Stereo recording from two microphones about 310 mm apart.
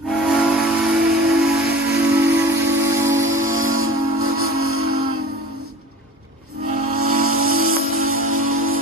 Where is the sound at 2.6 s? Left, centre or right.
Right.